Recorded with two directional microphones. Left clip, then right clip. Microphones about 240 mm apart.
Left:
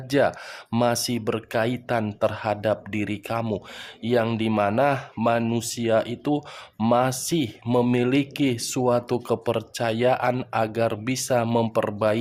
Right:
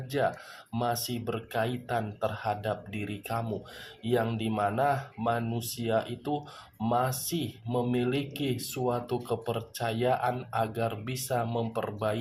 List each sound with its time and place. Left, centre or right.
0.1 s speech: left